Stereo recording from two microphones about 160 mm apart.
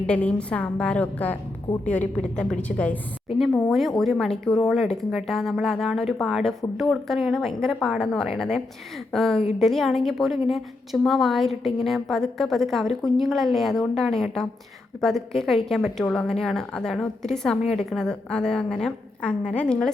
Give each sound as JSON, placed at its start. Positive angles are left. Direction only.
{"t": 0.1, "sound": "a woman's voice", "side_deg": 5}
{"t": 17.6, "sound": "a woman's voice", "side_deg": 40}
{"t": 17.9, "sound": "a woman's voice", "side_deg": 5}